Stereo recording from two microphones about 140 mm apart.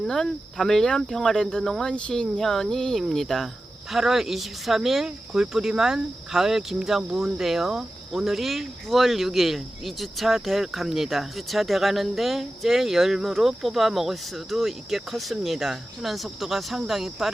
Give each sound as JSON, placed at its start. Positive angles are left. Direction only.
{"t": 0.0, "sound": "speech", "side_deg": 5}